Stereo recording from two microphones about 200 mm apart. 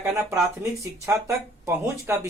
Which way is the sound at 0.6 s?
15° right (ahead or behind).